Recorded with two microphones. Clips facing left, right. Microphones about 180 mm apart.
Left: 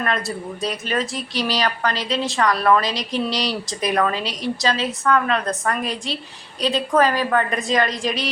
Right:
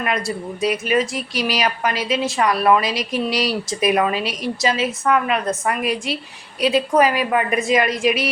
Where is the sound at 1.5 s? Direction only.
20° right (ahead or behind).